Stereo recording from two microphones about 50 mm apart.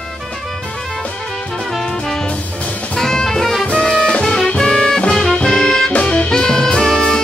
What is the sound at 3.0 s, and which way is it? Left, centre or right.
Music, centre.